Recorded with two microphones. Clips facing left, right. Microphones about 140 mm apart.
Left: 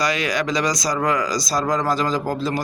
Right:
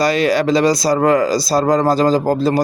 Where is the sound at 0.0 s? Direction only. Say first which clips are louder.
Right 7 dB; 30° right (ahead or behind).